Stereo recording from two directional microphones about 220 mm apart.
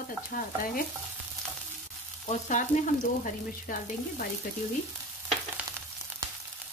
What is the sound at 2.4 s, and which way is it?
Frying, 35° left (ahead or behind).